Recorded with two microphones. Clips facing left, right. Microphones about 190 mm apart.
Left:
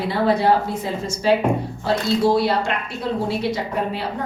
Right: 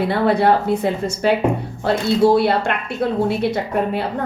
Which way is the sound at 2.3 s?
60° right (ahead or behind).